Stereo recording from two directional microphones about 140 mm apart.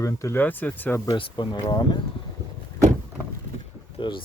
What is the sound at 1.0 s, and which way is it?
Speech, 35° left (ahead or behind).